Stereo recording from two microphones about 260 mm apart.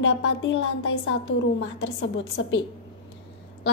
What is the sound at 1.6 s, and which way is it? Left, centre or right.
Speech, left.